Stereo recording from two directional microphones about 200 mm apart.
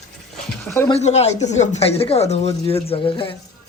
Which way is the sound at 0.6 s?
15° left (ahead or behind).